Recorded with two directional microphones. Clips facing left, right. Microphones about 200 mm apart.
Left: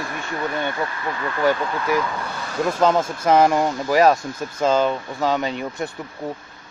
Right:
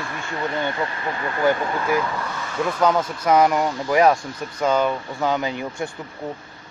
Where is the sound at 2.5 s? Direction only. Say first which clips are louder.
Left 2 dB; 30° left (ahead or behind).